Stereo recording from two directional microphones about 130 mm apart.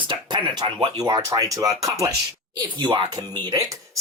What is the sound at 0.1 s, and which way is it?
Speech, 35° right (ahead or behind).